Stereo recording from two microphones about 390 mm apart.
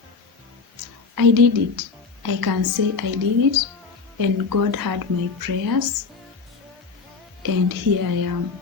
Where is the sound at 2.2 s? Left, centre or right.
Right.